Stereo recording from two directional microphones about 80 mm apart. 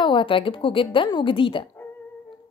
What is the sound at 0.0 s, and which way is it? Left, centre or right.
A woman's voice, left.